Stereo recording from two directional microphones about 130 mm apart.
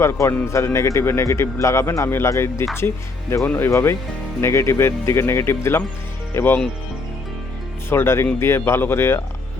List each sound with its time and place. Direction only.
0.0 s a man's voice: 20° left (ahead or behind)
7.9 s a man's voice: 20° left (ahead or behind)